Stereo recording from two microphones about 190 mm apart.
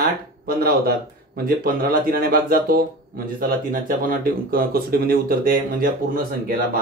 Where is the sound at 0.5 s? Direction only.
55° right (ahead or behind).